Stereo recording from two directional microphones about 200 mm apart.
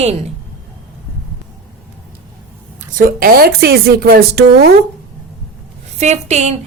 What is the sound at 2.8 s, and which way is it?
Speech, 45° right (ahead or behind).